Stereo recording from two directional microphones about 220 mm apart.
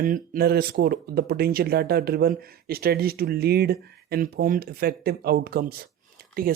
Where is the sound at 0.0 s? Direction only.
40° right (ahead or behind).